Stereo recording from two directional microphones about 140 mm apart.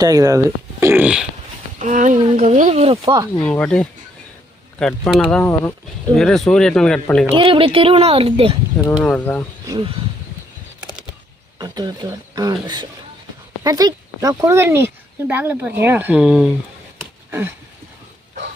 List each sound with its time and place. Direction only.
0.0 s speech: 25° right (ahead or behind)
1.0 s speech: 5° right (ahead or behind)
1.8 s speech: 65° right (ahead or behind); by 3.2 s 35° right (ahead or behind)
3.4 s speech: 10° left (ahead or behind)
6.1 s speech: centre (ahead or behind)
7.3 s speech: 35° right (ahead or behind)
9.0 s speech: 10° left (ahead or behind)
9.6 s speech: 35° right (ahead or behind)
11.6 s speech: 30° right (ahead or behind); by 16.5 s 5° right (ahead or behind)